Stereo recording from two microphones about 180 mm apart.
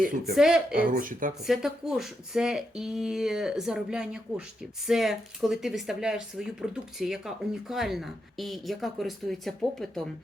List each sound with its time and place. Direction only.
0.0 s speech: 50° right (ahead or behind)
0.3 s speech: 5° right (ahead or behind)
0.7 s speech: 50° right (ahead or behind)
1.5 s speech: 5° right (ahead or behind)